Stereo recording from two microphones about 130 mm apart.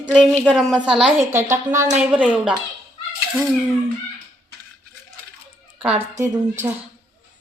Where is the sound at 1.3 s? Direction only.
20° right (ahead or behind).